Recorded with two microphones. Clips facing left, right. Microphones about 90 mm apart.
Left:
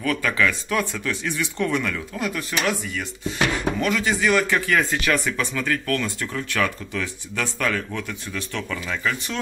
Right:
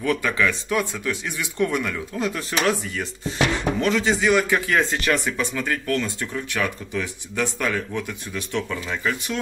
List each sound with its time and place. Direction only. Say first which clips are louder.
0.0 s speech: even; 20° right (ahead or behind)
3.8 s speech: right 2 dB; 25° right (ahead or behind)